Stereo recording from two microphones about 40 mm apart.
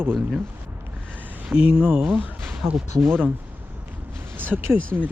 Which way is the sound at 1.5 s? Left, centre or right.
Right.